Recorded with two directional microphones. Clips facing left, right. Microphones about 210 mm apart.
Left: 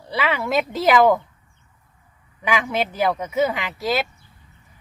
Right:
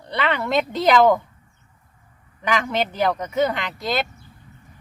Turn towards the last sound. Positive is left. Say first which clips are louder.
# left 2 dB
turn(degrees=5)  # may be behind; listen again after turning